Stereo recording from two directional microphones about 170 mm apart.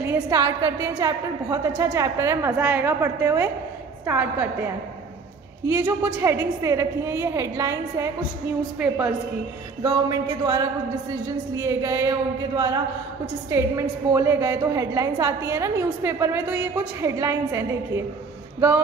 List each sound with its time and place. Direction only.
0.0 s a woman's voice: 15° right (ahead or behind)
5.7 s a woman's voice: 10° right (ahead or behind)
9.8 s a woman's voice: 25° right (ahead or behind)